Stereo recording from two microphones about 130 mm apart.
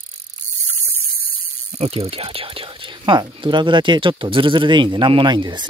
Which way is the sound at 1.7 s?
50° right (ahead or behind).